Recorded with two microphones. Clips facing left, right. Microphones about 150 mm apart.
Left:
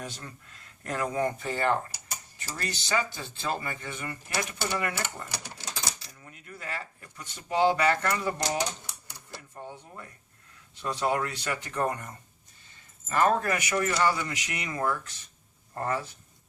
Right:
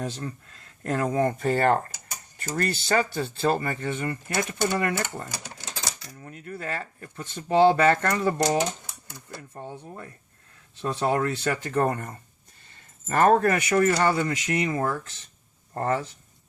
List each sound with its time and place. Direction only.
0.0 s speech: 35° right (ahead or behind); by 9.4 s 50° right (ahead or behind)
10.8 s speech: 35° right (ahead or behind)
11.6 s speech: 45° right (ahead or behind)
14.7 s speech: 30° right (ahead or behind)